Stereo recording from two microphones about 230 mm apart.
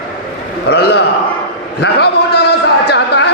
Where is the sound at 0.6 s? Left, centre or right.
Left.